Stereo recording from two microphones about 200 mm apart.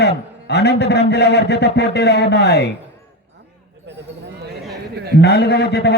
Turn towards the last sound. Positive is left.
turn(degrees=55)  # may be behind; listen again after turning